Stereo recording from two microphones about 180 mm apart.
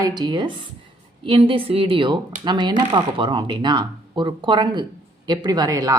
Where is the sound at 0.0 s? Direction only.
25° right (ahead or behind).